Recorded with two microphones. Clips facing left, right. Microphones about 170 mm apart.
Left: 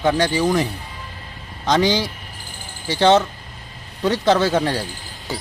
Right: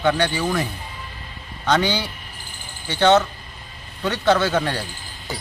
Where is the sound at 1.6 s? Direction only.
35° left (ahead or behind).